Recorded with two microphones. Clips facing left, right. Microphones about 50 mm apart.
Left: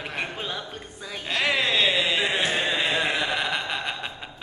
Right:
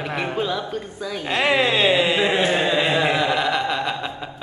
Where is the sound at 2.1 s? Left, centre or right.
Centre.